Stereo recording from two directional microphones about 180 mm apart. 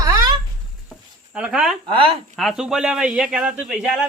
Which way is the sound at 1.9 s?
30° right (ahead or behind).